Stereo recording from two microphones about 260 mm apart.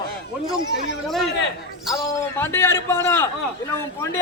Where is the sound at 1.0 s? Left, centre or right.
Centre.